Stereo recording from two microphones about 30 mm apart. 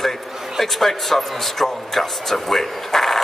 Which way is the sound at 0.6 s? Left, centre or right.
Centre.